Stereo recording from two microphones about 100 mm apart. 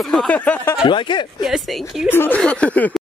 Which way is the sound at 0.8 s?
55° left (ahead or behind).